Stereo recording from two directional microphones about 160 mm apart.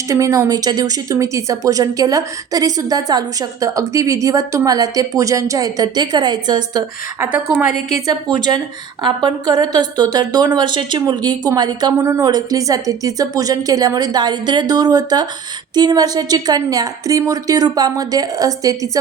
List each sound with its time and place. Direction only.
0.1 s speech: 20° right (ahead or behind)